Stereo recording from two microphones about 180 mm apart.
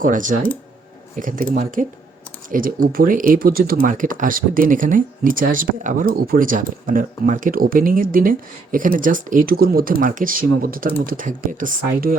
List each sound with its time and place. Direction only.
0.0 s speech: 45° right (ahead or behind)